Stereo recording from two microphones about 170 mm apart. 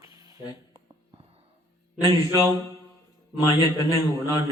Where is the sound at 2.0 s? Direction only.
20° left (ahead or behind).